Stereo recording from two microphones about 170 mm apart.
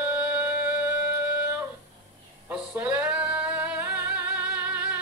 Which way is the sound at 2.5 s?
10° right (ahead or behind).